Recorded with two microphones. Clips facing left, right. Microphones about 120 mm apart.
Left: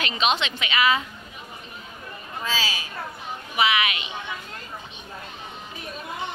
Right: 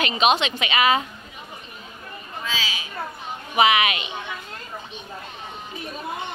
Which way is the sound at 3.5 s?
25° right (ahead or behind).